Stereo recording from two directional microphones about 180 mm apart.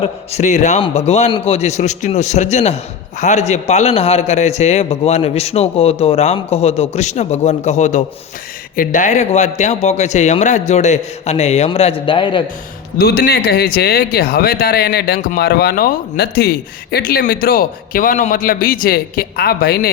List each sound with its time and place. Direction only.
0.0 s a man's voice: 35° left (ahead or behind)
13.0 s speech: 60° left (ahead or behind)